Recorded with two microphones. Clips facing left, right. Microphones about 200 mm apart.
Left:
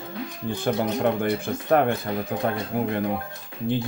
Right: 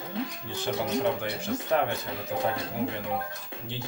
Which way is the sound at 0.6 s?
55° left (ahead or behind).